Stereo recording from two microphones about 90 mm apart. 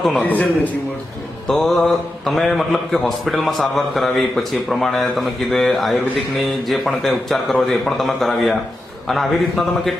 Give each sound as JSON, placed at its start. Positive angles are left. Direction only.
{"t": 0.0, "sound": "a man's voice", "side_deg": 5}
{"t": 0.3, "sound": "a man's voice", "side_deg": 20}
{"t": 1.5, "sound": "a man's voice", "side_deg": 0}